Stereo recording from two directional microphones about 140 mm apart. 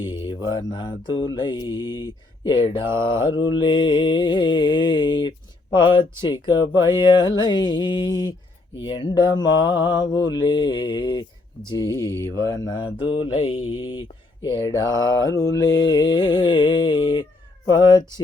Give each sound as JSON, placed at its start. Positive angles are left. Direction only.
{"t": 0.0, "sound": "mantra", "side_deg": 35}
{"t": 11.7, "sound": "speech", "side_deg": 25}
{"t": 12.6, "sound": "mantra", "side_deg": 35}